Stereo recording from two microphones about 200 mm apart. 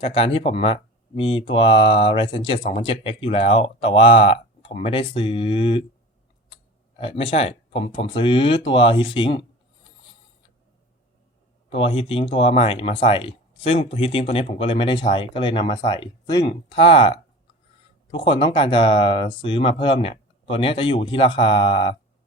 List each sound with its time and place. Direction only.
0.0 s speech: 25° left (ahead or behind)
7.0 s speech: 30° left (ahead or behind)
11.7 s speech: 30° left (ahead or behind)